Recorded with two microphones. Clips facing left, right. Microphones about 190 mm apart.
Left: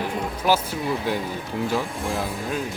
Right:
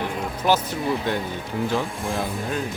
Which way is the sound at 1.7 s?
Centre (ahead or behind).